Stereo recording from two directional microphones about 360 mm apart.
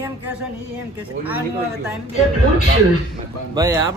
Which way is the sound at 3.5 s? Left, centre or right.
Centre.